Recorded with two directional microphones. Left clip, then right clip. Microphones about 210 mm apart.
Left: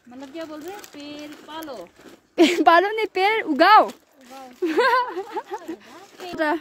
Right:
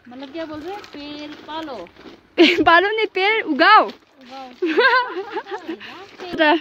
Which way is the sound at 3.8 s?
5° left (ahead or behind).